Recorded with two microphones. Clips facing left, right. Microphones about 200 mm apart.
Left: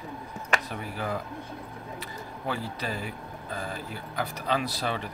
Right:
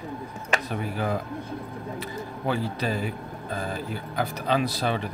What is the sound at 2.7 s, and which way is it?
Speech, 25° right (ahead or behind).